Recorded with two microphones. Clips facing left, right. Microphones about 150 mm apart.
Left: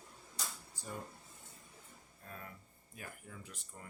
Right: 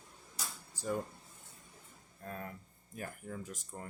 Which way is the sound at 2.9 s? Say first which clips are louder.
Right 8 dB; 45° right (ahead or behind).